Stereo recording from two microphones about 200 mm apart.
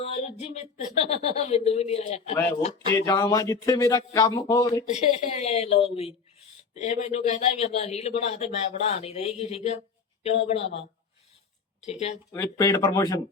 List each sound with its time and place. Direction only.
0.0 s a man's voice: 30° left (ahead or behind)
2.9 s speech: 15° left (ahead or behind)
4.9 s a man's voice: 35° left (ahead or behind)
11.9 s a man's voice: 30° left (ahead or behind)
12.3 s speech: 15° left (ahead or behind)